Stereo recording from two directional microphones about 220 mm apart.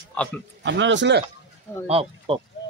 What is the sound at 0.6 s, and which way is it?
Speech, 55° right (ahead or behind).